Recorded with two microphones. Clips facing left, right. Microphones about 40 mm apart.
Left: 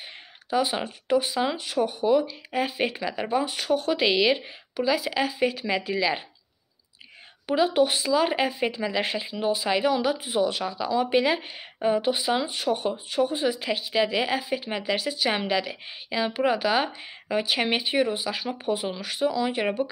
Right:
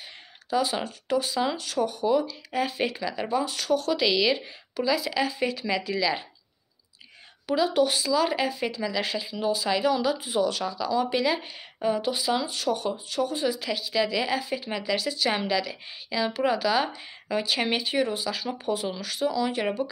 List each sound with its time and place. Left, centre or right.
0.5 s speech: left
7.4 s speech: left